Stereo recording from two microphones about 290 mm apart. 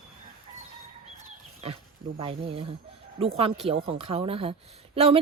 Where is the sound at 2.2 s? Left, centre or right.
Centre.